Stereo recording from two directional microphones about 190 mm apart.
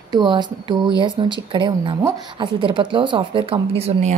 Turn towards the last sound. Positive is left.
turn(degrees=-35)  # may be behind; listen again after turning